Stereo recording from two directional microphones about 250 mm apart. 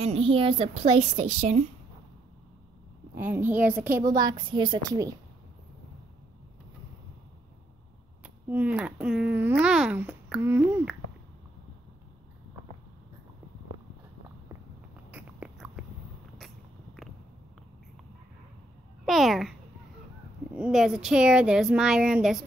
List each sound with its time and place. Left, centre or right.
0.0 s a woman's voice: right
3.2 s a woman's voice: centre
8.2 s a child's voice: centre
15.0 s biting: centre
16.3 s a sound: centre
19.0 s a child's voice: centre
20.5 s a child's voice: centre